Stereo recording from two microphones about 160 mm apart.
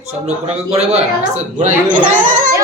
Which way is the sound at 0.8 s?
40° right (ahead or behind).